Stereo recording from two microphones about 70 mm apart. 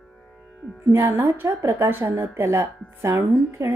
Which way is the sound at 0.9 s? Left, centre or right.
Right.